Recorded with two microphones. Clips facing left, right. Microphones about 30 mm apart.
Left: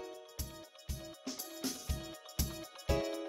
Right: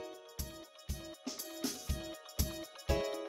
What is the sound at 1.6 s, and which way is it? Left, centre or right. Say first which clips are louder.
Music: right 1 dB; centre.